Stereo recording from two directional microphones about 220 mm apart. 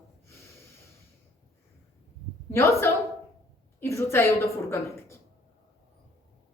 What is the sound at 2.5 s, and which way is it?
A woman's voice, 10° left (ahead or behind).